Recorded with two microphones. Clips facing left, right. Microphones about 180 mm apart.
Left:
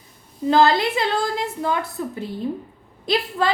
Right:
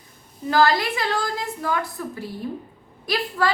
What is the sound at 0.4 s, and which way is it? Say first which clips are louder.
A woman's voice: left 3 dB; 25° left (ahead or behind).